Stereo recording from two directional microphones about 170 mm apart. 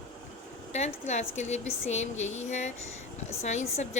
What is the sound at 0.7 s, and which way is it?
Speech, 40° left (ahead or behind).